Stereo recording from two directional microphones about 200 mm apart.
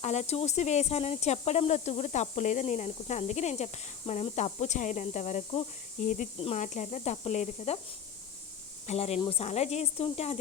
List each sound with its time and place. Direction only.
0.0 s speech: 35° left (ahead or behind)
8.9 s speech: 30° left (ahead or behind)